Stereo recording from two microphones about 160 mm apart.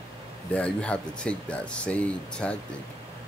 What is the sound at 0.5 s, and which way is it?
Speech, 5° left (ahead or behind).